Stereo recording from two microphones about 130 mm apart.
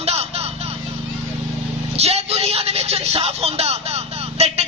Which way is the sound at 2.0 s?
55° right (ahead or behind).